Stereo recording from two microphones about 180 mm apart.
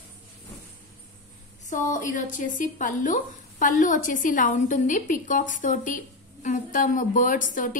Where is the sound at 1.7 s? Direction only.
45° left (ahead or behind).